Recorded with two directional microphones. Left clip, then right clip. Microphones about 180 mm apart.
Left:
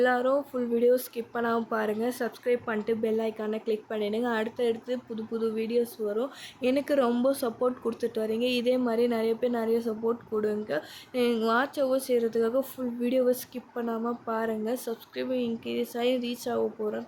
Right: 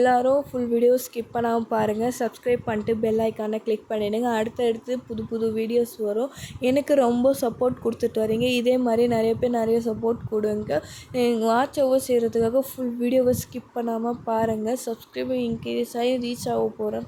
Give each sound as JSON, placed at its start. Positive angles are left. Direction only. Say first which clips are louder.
{"t": 0.0, "sound": "speech", "louder": "right 5 dB", "side_deg": -30}